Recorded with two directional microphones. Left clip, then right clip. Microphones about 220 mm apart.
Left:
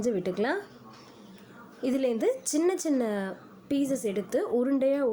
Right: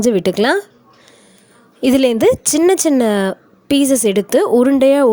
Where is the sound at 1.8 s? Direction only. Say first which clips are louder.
Right 15 dB; 45° right (ahead or behind).